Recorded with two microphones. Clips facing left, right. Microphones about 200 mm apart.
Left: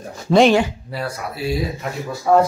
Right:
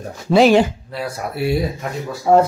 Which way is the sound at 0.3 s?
5° right (ahead or behind).